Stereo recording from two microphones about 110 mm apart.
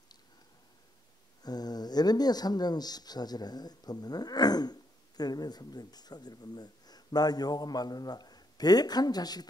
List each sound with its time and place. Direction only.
1.4 s speech: 35° left (ahead or behind)